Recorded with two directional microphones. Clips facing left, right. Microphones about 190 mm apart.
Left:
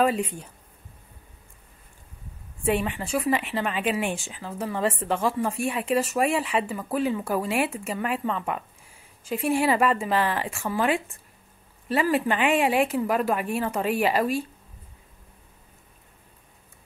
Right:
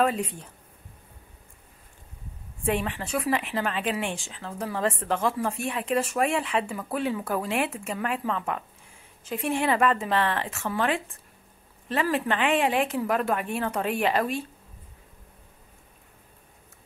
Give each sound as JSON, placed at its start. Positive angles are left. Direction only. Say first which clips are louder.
{"t": 0.0, "sound": "speech", "louder": "left 2 dB", "side_deg": 5}
{"t": 2.6, "sound": "speech", "louder": "left 2 dB", "side_deg": 5}